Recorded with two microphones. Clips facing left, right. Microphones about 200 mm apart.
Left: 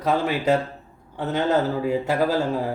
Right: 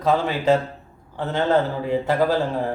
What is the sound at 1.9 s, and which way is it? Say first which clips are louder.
Speech: right 1 dB; 10° left (ahead or behind).